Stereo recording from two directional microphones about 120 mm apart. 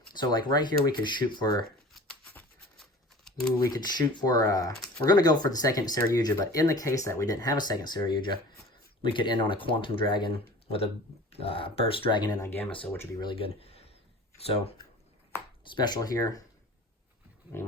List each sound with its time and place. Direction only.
0.2 s speech: 40° left (ahead or behind)
1.9 s a sound: centre (ahead or behind)
3.3 s camera: 5° left (ahead or behind)
3.6 s speech: 35° left (ahead or behind)
13.3 s speech: 55° left (ahead or behind)
15.6 s speech: 40° left (ahead or behind)
17.5 s speech: 20° left (ahead or behind)